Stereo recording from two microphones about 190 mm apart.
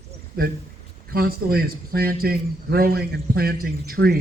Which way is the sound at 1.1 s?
55° right (ahead or behind).